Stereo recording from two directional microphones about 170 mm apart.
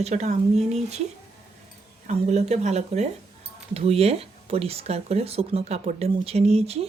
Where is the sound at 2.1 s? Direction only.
40° right (ahead or behind).